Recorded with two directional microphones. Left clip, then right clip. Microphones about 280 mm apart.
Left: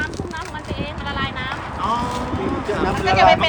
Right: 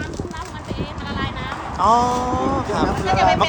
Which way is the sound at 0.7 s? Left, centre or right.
Centre.